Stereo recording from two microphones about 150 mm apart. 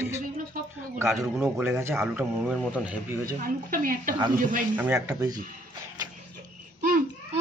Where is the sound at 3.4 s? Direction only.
75° right (ahead or behind).